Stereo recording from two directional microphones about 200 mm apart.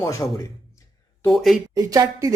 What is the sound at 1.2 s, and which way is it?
Speech, centre (ahead or behind).